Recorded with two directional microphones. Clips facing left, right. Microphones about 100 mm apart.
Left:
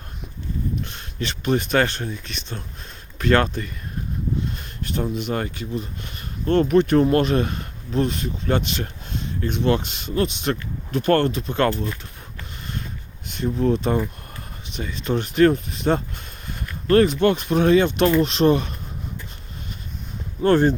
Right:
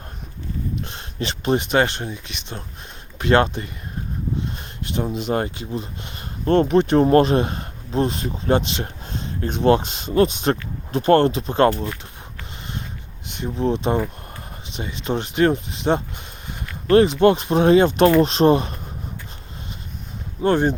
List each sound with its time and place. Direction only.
0.9 s speech: 30° right (ahead or behind)
2.0 s speech: 15° right (ahead or behind)
3.2 s speech: 25° right (ahead or behind)
4.8 s speech: 20° right (ahead or behind)
13.2 s speech: 20° right (ahead or behind)
20.4 s speech: 20° right (ahead or behind)